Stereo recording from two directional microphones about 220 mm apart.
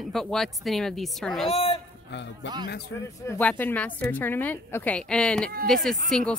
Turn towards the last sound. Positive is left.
turn(degrees=0)  # may be behind; listen again after turning